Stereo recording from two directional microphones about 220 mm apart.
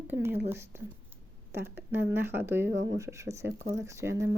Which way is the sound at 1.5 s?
10° right (ahead or behind).